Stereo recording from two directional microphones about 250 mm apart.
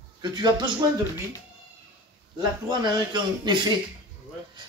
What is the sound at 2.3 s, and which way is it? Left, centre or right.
A man's voice, centre.